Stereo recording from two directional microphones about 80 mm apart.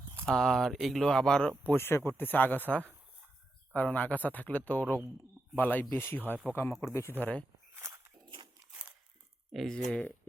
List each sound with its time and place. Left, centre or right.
0.3 s speech: centre
1.7 s speech: left
3.7 s speech: centre; by 7.1 s left
7.2 s speech: centre
9.5 s speech: centre